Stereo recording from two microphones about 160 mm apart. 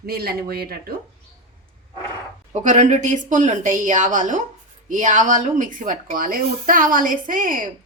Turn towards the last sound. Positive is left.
turn(degrees=-60)  # may be behind; listen again after turning